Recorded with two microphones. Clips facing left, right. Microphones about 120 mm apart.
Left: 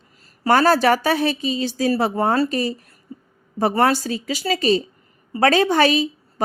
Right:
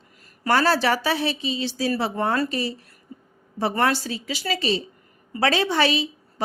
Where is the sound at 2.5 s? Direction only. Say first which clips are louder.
Left 4 dB; 45° left (ahead or behind).